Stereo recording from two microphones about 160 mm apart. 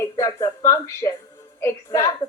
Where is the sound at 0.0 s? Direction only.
20° left (ahead or behind).